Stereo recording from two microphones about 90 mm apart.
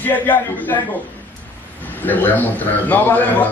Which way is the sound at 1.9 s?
20° left (ahead or behind).